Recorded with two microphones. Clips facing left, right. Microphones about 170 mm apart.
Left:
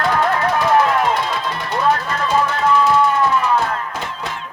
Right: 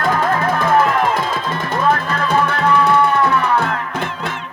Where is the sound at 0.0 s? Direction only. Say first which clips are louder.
Even; 50° right (ahead or behind).